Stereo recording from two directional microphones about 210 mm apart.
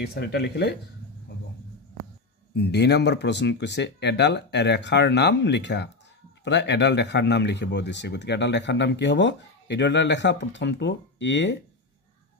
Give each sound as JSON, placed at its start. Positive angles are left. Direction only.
{"t": 0.0, "sound": "speech", "side_deg": 50}
{"t": 2.5, "sound": "speech", "side_deg": 50}